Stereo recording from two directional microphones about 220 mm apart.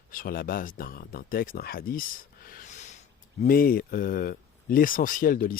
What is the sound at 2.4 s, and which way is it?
Snort, 40° left (ahead or behind).